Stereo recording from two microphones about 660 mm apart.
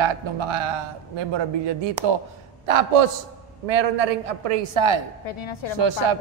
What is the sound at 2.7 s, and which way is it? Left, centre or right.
A man's voice, right.